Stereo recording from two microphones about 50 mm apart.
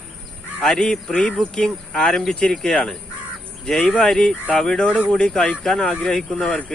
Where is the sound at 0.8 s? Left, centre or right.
Centre.